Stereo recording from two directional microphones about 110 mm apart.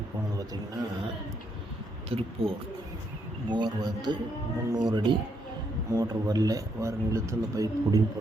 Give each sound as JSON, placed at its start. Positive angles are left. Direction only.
{"t": 0.3, "sound": "a man's voice", "side_deg": -35}
{"t": 2.0, "sound": "speech", "side_deg": -60}
{"t": 3.5, "sound": "a man's voice", "side_deg": -40}